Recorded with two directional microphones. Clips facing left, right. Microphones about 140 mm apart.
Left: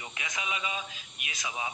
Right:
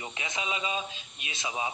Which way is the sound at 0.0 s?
25° right (ahead or behind).